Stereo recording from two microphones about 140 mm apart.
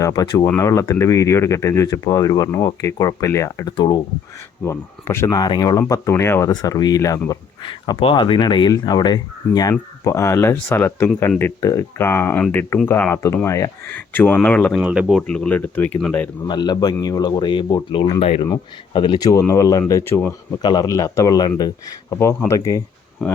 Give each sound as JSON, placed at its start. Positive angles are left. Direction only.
{"t": 0.0, "sound": "speech", "side_deg": 30}
{"t": 3.8, "sound": "speech", "side_deg": 30}
{"t": 4.6, "sound": "speech", "side_deg": 20}
{"t": 5.3, "sound": "speech", "side_deg": 30}
{"t": 5.9, "sound": "speech", "side_deg": 20}
{"t": 14.8, "sound": "speech", "side_deg": -10}
{"t": 15.3, "sound": "speech", "side_deg": 10}
{"t": 16.5, "sound": "speech", "side_deg": 30}
{"t": 18.0, "sound": "speech", "side_deg": 45}
{"t": 18.9, "sound": "speech", "side_deg": 30}
{"t": 20.6, "sound": "speech", "side_deg": 30}